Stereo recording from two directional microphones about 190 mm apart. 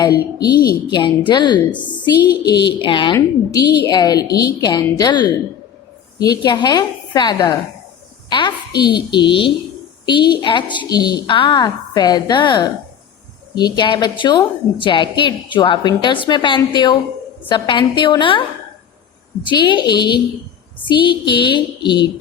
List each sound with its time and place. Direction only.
0.9 s a woman's voice: 20° left (ahead or behind)
6.3 s a woman's voice: 20° left (ahead or behind)
8.3 s a sound: 25° left (ahead or behind)
8.8 s a woman's voice: 25° left (ahead or behind)
19.5 s a woman's voice: 25° left (ahead or behind)